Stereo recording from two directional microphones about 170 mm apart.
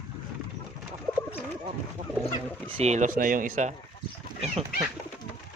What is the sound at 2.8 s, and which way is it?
Speech, 45° right (ahead or behind).